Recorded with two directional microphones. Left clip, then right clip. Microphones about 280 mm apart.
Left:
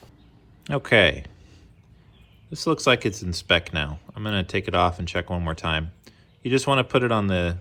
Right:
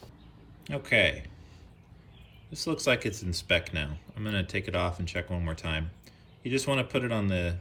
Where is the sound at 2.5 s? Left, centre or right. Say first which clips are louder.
Left 7 dB; centre.